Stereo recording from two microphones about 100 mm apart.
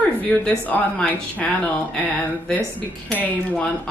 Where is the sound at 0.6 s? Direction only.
15° left (ahead or behind).